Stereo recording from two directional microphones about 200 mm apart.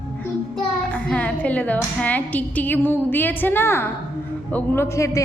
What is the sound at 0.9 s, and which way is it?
A woman's voice, 5° left (ahead or behind).